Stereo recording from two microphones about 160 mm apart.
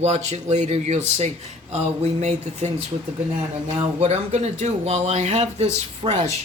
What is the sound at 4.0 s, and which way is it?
Speech, 40° right (ahead or behind).